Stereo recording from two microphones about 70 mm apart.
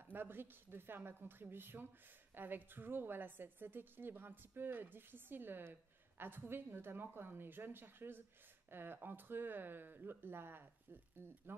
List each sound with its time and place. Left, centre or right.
0.0 s a woman's voice: right